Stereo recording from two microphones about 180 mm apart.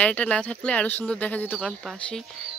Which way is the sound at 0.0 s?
5° left (ahead or behind).